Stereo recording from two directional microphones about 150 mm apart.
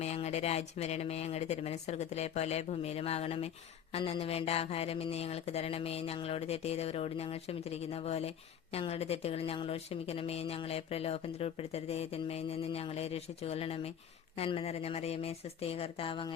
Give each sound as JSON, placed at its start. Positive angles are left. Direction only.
{"t": 0.0, "sound": "a woman's voice", "side_deg": 45}